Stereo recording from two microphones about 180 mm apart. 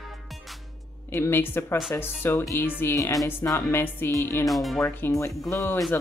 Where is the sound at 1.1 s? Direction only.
15° left (ahead or behind).